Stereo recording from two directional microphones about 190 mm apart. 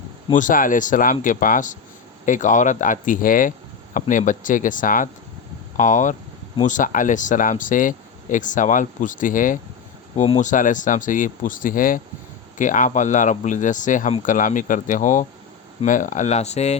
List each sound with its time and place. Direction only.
0.3 s speech: 45° left (ahead or behind)